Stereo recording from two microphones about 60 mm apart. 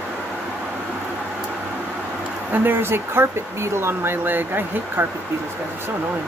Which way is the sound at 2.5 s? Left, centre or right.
Right.